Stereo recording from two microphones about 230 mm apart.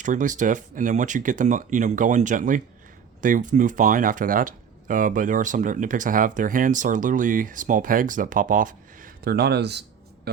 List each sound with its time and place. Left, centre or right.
0.0 s speech: right